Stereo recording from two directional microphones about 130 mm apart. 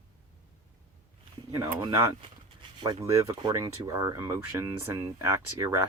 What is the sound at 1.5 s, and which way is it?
Speech, 25° right (ahead or behind).